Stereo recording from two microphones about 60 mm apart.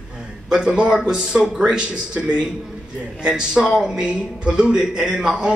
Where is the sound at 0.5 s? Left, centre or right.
Centre.